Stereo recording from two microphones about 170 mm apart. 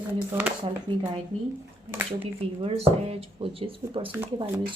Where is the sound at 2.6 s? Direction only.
35° right (ahead or behind).